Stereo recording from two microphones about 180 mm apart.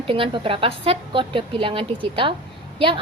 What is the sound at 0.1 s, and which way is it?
A woman's voice, 30° right (ahead or behind).